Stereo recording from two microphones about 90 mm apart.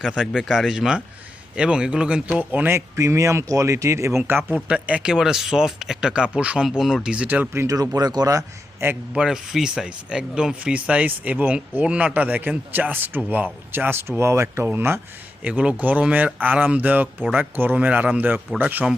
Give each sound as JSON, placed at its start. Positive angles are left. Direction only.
{"t": 0.0, "sound": "a man's voice", "side_deg": -5}
{"t": 2.7, "sound": "speech", "side_deg": -30}
{"t": 7.7, "sound": "speech", "side_deg": -45}
{"t": 8.8, "sound": "speech", "side_deg": -30}
{"t": 9.1, "sound": "speech", "side_deg": -5}
{"t": 15.4, "sound": "speech", "side_deg": -15}